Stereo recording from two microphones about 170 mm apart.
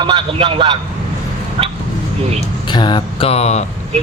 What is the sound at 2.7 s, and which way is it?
Speech, 25° left (ahead or behind).